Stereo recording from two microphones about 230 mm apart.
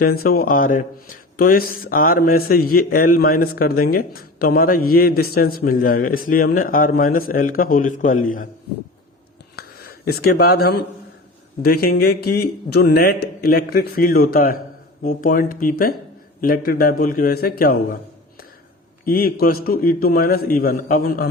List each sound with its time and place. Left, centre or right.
0.0 s a man's voice: left
9.6 s a man's voice: left
19.0 s a man's voice: left